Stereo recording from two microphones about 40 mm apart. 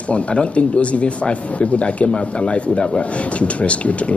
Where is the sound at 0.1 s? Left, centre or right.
Left.